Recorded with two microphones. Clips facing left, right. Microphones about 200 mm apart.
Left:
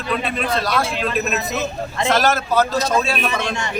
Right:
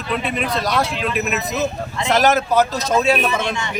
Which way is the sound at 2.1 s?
15° right (ahead or behind).